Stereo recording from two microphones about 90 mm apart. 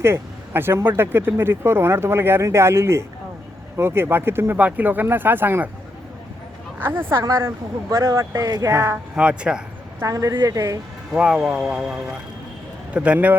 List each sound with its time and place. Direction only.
0.0 s speech: 25° right (ahead or behind)
6.7 s speech: 25° right (ahead or behind)
8.7 s speech: 25° right (ahead or behind)
9.1 s speech: 10° right (ahead or behind)
10.1 s speech: 40° right (ahead or behind)
11.1 s speech: 10° right (ahead or behind)